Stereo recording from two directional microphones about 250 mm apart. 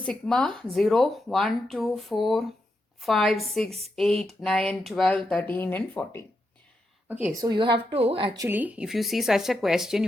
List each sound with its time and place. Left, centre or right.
0.0 s speech: centre
7.1 s a woman's voice: centre
8.4 s speech: centre